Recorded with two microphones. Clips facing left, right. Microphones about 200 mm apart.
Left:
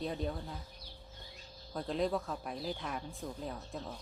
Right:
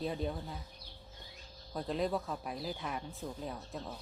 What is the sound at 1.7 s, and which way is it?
Speech, centre (ahead or behind).